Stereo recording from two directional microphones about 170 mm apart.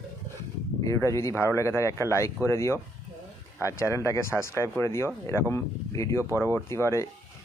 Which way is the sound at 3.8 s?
15° left (ahead or behind).